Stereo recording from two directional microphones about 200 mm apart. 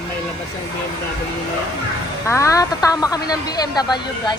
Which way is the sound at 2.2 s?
15° left (ahead or behind).